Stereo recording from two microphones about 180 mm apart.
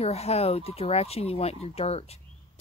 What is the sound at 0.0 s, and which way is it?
Speech, 35° left (ahead or behind).